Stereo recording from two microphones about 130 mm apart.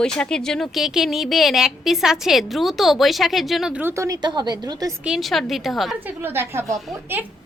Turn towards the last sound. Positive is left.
turn(degrees=-15)  # may be behind; listen again after turning